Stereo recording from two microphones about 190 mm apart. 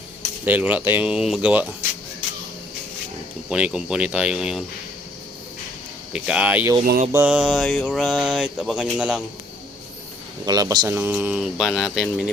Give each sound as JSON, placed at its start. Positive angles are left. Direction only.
{"t": 0.2, "sound": "speech", "side_deg": -10}
{"t": 3.5, "sound": "mantra", "side_deg": -5}
{"t": 6.1, "sound": "speech", "side_deg": -5}
{"t": 7.1, "sound": "mantra", "side_deg": -10}
{"t": 10.4, "sound": "speech", "side_deg": -20}
{"t": 10.9, "sound": "mantra", "side_deg": -10}